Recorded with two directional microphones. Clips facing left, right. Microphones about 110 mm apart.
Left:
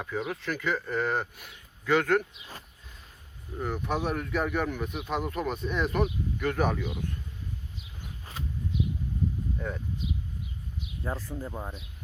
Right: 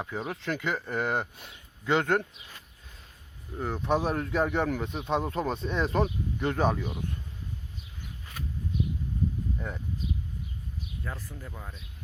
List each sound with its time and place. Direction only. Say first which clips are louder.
0.0 s speech: left 1 dB; 25° right (ahead or behind)
3.6 s speech: right 3 dB; 25° right (ahead or behind)
8.2 s a sound: left 1 dB; 30° left (ahead or behind)
9.6 s speech: left 2 dB; 15° right (ahead or behind)
11.0 s speech: left 8 dB; 30° left (ahead or behind)